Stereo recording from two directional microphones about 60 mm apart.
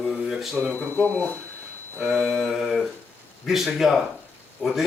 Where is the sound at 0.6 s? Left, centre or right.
Left.